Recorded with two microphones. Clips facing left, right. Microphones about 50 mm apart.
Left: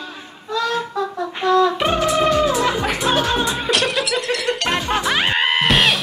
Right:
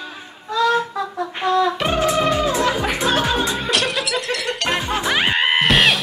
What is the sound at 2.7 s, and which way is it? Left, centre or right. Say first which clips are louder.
Music: even; centre.